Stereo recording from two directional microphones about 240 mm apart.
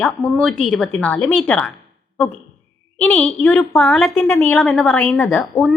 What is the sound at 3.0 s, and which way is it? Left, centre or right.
A woman's voice, centre.